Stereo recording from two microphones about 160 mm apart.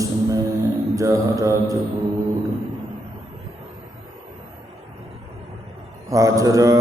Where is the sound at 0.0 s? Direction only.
20° right (ahead or behind).